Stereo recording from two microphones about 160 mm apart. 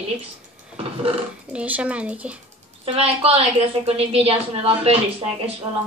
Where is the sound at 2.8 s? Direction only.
40° right (ahead or behind).